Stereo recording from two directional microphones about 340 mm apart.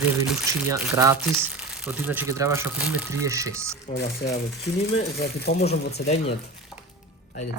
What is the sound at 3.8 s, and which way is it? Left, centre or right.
Speech, left.